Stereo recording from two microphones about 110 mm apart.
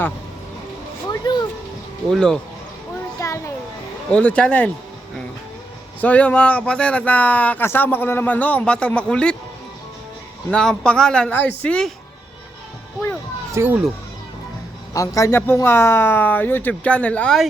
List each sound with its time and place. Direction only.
1.1 s a sound: 40° left (ahead or behind)
2.0 s speech: 5° left (ahead or behind)
3.2 s children playing: 30° left (ahead or behind)
4.1 s speech: 10° left (ahead or behind)
6.0 s speech: 15° left (ahead or behind)
10.5 s speech: 5° left (ahead or behind)
13.5 s speech: 20° right (ahead or behind)
14.9 s speech: 30° left (ahead or behind); by 17.3 s 10° left (ahead or behind)